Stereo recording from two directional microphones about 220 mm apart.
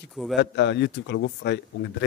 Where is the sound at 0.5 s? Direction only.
50° left (ahead or behind).